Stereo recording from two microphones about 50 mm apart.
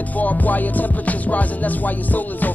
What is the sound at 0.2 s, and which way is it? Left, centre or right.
Music, left.